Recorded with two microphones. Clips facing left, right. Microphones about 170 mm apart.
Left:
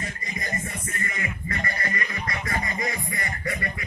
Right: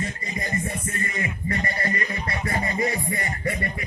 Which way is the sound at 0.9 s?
25° right (ahead or behind).